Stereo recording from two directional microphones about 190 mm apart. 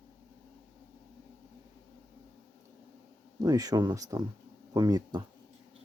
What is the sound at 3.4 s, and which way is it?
Speech, 20° right (ahead or behind).